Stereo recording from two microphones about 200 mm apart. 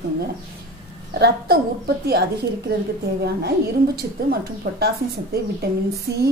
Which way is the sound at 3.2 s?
50° right (ahead or behind).